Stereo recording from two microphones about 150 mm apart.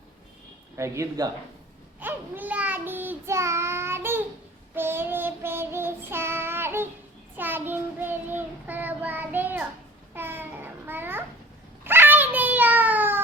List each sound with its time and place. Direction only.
0.8 s speech: 20° right (ahead or behind)
2.0 s child singing: 10° right (ahead or behind)
10.2 s babbling: 15° right (ahead or behind)
11.8 s cat: 15° right (ahead or behind)